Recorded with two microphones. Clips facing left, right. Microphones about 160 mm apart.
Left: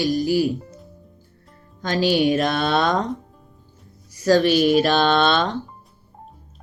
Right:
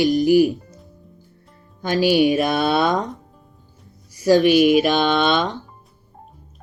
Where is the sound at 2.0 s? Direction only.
15° right (ahead or behind).